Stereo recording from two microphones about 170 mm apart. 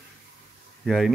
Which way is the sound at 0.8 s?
Centre (ahead or behind).